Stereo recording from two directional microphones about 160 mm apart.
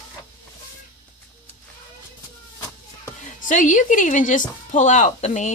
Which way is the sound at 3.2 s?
50° left (ahead or behind).